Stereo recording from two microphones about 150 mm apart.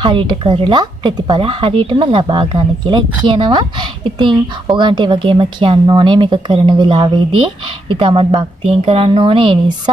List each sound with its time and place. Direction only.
0.0 s speech: 35° right (ahead or behind)